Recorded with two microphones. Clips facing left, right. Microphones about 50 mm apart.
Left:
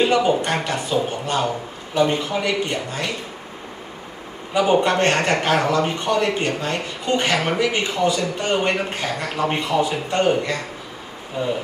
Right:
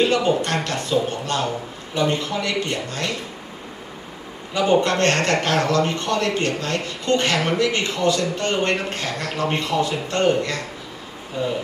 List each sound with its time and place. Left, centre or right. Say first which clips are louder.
0.0 s a man's voice: left 1 dB; centre
4.6 s speech: left 1 dB; centre